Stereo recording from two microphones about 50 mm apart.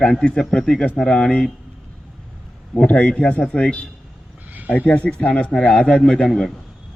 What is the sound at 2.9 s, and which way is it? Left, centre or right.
Speech, left.